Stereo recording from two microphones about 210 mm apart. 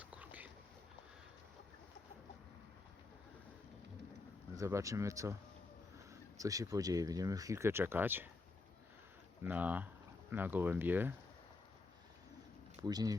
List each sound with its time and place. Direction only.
0.0 s a sound: 5° right (ahead or behind)
4.5 s speech: 15° right (ahead or behind)
9.4 s speech: 10° right (ahead or behind)
12.8 s speech: 20° right (ahead or behind)